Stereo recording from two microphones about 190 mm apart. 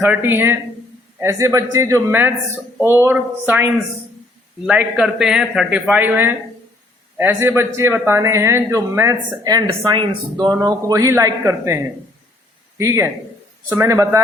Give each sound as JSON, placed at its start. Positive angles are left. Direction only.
{"t": 0.0, "sound": "a man's voice", "side_deg": -10}
{"t": 12.8, "sound": "a man's voice", "side_deg": -15}